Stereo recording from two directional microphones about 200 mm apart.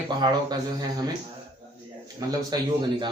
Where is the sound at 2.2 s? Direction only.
20° right (ahead or behind).